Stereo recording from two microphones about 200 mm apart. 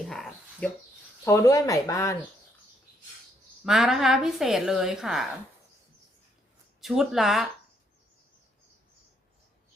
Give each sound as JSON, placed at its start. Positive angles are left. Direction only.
{"t": 0.1, "sound": "a sound", "side_deg": 0}
{"t": 1.2, "sound": "speech", "side_deg": 15}
{"t": 3.6, "sound": "a woman's voice", "side_deg": 0}
{"t": 6.8, "sound": "a woman's voice", "side_deg": 0}